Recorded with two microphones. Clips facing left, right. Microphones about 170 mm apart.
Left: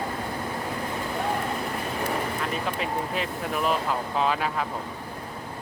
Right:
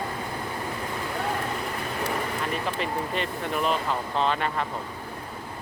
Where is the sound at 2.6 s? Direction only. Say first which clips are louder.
Even; centre (ahead or behind).